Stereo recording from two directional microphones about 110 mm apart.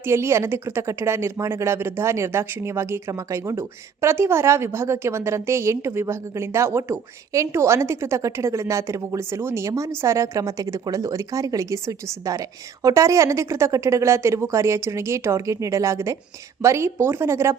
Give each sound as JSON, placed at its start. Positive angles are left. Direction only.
{"t": 0.0, "sound": "speech", "side_deg": -25}